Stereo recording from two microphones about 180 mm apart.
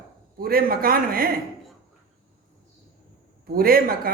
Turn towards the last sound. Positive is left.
turn(degrees=-55)  # may be behind; listen again after turning